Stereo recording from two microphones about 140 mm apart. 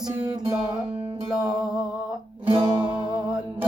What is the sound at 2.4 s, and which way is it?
Music, 35° right (ahead or behind).